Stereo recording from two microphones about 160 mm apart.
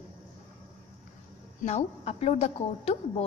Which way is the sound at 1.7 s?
40° left (ahead or behind).